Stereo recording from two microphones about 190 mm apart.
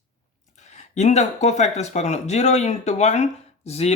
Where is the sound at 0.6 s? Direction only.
40° left (ahead or behind).